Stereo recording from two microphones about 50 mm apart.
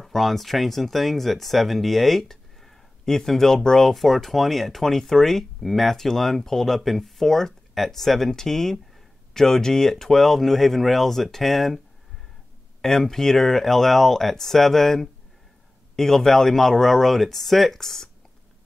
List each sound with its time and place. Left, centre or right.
0.0 s speech: centre
12.8 s speech: centre